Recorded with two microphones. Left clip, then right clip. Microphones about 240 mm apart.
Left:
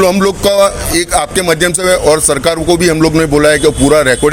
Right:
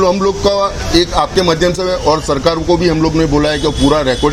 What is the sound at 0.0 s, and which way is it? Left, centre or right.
A man's voice, left.